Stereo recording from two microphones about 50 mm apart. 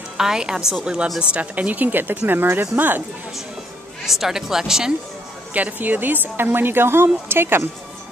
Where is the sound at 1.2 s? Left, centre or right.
Right.